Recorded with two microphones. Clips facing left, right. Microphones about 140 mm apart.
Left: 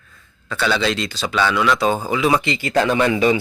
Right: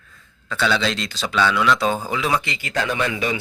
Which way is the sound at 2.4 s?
30° left (ahead or behind).